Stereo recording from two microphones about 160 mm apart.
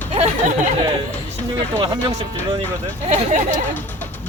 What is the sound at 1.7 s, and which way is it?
Speech, 25° right (ahead or behind).